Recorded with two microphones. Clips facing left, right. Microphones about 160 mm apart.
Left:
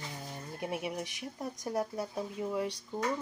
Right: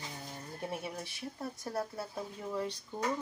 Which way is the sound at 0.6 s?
10° left (ahead or behind).